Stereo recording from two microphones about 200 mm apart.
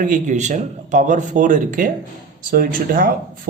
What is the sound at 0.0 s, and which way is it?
Speech, 40° right (ahead or behind).